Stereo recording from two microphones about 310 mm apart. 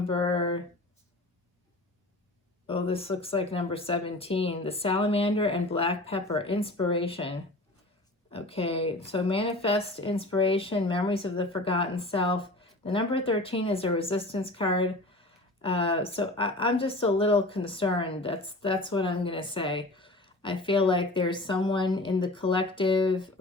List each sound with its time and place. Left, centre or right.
0.0 s speech: centre
2.6 s speech: centre